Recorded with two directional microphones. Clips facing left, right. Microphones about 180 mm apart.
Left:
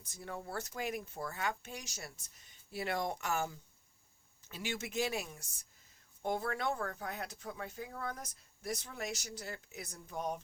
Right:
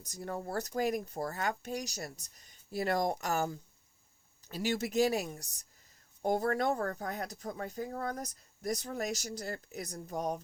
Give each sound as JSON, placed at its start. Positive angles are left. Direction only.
{"t": 0.0, "sound": "speech", "side_deg": -40}